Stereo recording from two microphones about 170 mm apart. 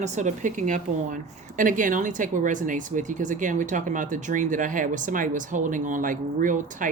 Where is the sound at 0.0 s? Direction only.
45° right (ahead or behind).